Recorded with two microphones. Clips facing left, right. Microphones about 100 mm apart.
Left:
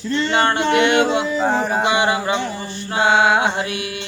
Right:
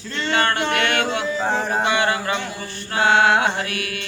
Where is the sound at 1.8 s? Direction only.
20° left (ahead or behind).